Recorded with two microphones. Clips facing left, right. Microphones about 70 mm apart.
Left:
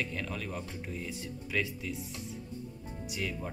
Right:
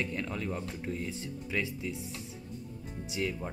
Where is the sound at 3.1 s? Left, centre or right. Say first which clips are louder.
Right 3 dB; right.